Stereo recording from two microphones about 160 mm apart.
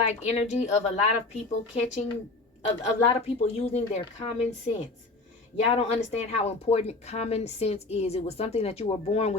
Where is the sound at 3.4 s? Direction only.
40° left (ahead or behind).